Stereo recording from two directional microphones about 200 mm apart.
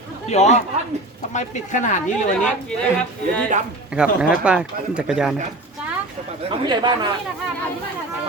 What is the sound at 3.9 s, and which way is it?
Speech, 5° right (ahead or behind).